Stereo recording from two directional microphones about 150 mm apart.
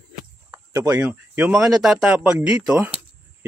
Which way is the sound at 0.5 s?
25° right (ahead or behind).